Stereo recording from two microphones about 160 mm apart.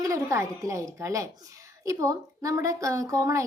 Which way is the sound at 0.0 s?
20° right (ahead or behind).